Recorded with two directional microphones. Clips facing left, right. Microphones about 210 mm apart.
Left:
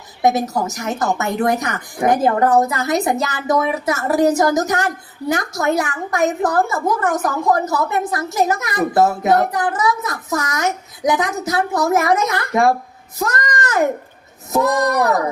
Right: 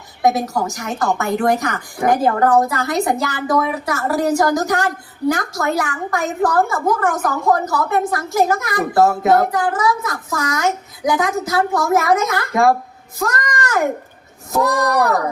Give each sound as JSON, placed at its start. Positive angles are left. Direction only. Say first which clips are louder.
{"t": 0.2, "sound": "a woman's voice", "louder": "even", "side_deg": 20}